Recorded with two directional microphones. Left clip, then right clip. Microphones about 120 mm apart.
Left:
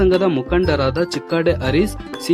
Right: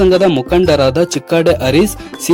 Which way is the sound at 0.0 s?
35° right (ahead or behind).